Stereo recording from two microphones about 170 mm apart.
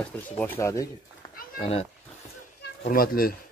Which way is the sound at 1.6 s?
35° left (ahead or behind).